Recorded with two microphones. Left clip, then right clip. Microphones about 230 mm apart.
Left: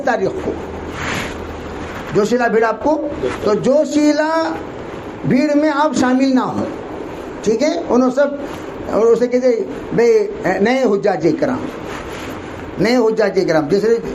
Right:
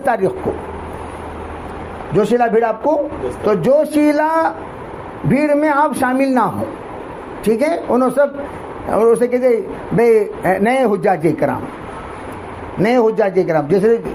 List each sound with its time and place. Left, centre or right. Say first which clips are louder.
0.0 s speech: right 1 dB; right
2.1 s a man's voice: right 1 dB; right
12.8 s a man's voice: right 1 dB; right